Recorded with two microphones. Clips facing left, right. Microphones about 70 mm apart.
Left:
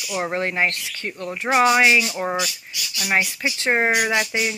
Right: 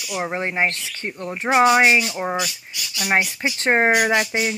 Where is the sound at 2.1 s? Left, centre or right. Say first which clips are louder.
Even; centre.